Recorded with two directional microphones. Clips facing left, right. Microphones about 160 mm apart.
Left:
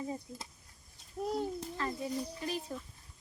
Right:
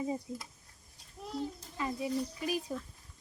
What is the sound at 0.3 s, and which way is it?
Speech, 25° right (ahead or behind).